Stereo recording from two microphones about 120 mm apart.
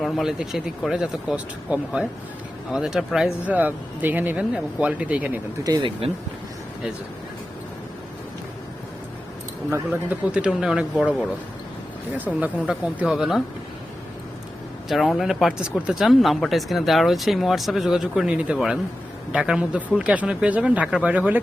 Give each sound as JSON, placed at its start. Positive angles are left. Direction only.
{"t": 0.0, "sound": "speech", "side_deg": -5}
{"t": 5.6, "sound": "speech", "side_deg": -30}
{"t": 10.1, "sound": "speech", "side_deg": -10}
{"t": 12.1, "sound": "speech", "side_deg": -15}
{"t": 14.8, "sound": "speech", "side_deg": 0}